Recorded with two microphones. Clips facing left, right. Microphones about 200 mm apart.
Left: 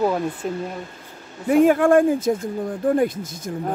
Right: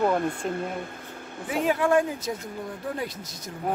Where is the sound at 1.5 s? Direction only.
50° left (ahead or behind).